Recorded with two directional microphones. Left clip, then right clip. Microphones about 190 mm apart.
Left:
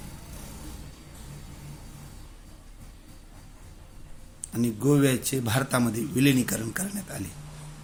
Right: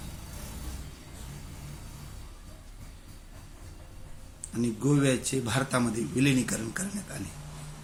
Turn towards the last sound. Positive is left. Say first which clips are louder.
# left 2 dB
turn(degrees=45)  # may be behind; listen again after turning